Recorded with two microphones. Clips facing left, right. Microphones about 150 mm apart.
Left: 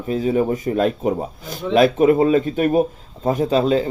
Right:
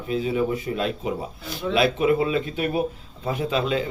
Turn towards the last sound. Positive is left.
turn(degrees=40)  # may be behind; listen again after turning